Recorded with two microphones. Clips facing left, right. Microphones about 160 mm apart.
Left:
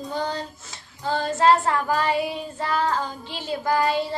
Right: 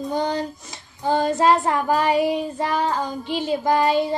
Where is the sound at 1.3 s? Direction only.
15° right (ahead or behind).